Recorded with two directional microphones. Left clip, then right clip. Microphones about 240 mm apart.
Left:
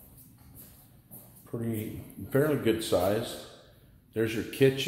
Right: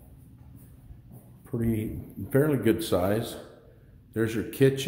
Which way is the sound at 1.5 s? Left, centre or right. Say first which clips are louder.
Right 5 dB; centre.